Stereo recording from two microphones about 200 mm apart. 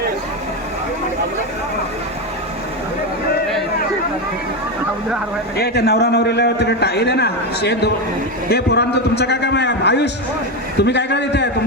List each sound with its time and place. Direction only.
5.5 s a man's voice: 50° left (ahead or behind)